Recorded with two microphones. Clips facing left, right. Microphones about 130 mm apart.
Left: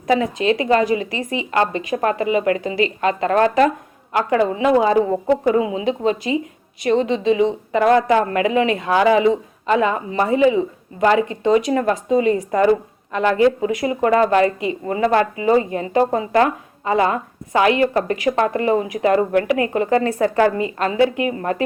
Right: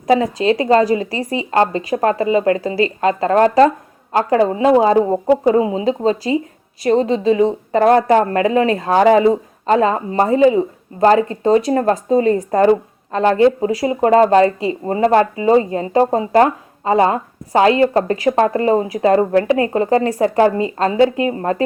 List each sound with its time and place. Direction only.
0.4 s speech: 30° right (ahead or behind)